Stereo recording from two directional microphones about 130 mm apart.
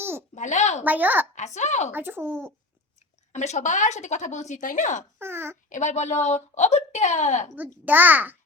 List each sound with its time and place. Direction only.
0.0 s a sound: 20° right (ahead or behind)
0.3 s speech: 65° left (ahead or behind)
0.9 s speech: 15° right (ahead or behind)
1.4 s speech: 65° left (ahead or behind)
1.9 s speech: 15° right (ahead or behind)
3.3 s speech: 60° left (ahead or behind)
5.2 s speech: 20° right (ahead or behind)
5.6 s speech: 70° left (ahead or behind)
7.9 s speech: 15° right (ahead or behind)